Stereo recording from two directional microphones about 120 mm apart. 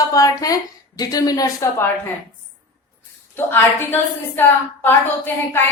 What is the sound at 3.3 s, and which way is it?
A woman's voice, 20° left (ahead or behind).